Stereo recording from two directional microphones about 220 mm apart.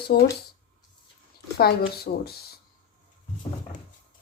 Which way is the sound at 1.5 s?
45° left (ahead or behind).